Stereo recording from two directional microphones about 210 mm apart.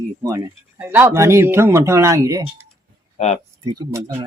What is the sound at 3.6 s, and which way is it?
Speech, 20° right (ahead or behind).